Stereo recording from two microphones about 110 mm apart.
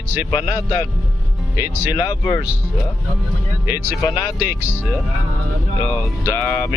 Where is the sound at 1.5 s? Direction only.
20° right (ahead or behind).